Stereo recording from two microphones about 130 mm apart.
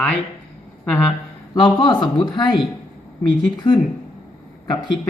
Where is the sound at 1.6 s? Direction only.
35° left (ahead or behind).